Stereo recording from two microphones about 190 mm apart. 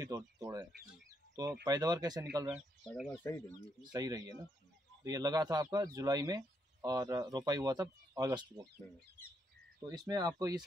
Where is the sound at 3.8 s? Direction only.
20° right (ahead or behind).